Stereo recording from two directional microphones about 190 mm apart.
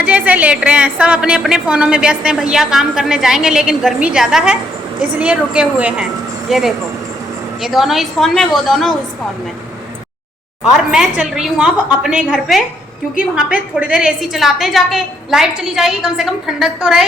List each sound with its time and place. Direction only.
0.0 s a woman's voice: 5° right (ahead or behind)
10.6 s a woman's voice: 5° right (ahead or behind)